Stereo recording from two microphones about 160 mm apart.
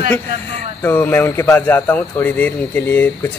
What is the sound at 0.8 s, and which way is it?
Speech, 15° left (ahead or behind).